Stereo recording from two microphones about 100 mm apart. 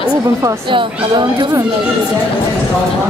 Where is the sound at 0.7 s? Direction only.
55° right (ahead or behind).